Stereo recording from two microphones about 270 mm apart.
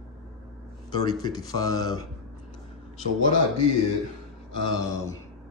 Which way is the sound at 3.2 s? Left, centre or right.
Left.